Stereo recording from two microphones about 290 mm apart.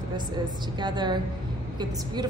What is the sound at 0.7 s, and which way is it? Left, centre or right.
A woman's voice, centre.